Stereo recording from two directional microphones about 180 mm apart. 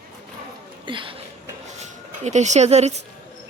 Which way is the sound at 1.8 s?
40° right (ahead or behind).